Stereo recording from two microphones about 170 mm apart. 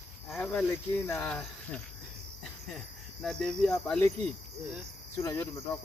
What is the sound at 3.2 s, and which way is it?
Cricket, 5° left (ahead or behind).